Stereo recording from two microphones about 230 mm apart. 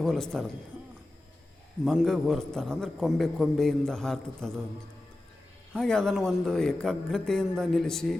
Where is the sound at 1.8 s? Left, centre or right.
Centre.